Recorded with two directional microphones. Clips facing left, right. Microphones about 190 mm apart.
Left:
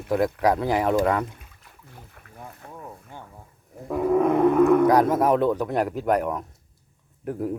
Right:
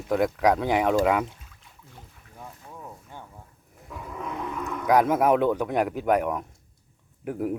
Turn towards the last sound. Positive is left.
turn(degrees=-5)  # may be behind; listen again after turning